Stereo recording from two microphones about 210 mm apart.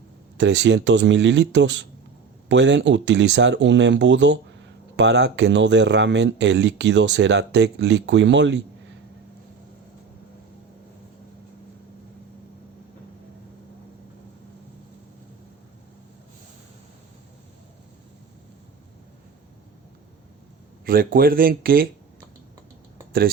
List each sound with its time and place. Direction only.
0.3 s speech: 55° right (ahead or behind)
20.8 s speech: 45° right (ahead or behind)